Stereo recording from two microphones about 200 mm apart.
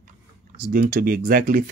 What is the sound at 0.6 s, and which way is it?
Speech, 45° right (ahead or behind).